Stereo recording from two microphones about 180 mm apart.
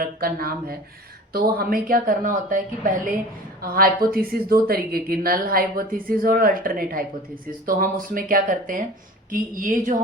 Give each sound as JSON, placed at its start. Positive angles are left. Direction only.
{"t": 0.0, "sound": "speech", "side_deg": -55}